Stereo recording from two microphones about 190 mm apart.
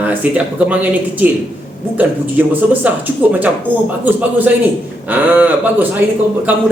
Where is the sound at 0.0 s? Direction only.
10° right (ahead or behind).